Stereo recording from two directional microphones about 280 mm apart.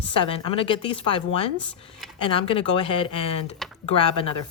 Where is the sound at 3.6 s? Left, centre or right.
Centre.